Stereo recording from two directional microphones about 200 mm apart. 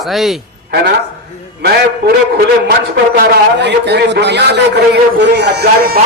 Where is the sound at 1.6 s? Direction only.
50° right (ahead or behind).